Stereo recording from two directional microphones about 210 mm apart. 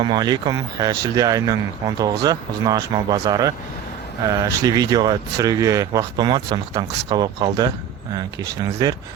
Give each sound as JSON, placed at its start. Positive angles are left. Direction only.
{"t": 0.0, "sound": "speech", "side_deg": -20}
{"t": 8.8, "sound": "speech", "side_deg": -20}